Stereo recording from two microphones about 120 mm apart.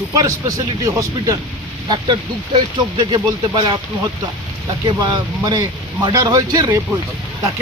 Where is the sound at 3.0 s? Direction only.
40° right (ahead or behind).